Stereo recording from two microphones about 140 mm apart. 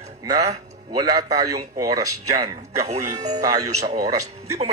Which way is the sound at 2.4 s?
50° right (ahead or behind).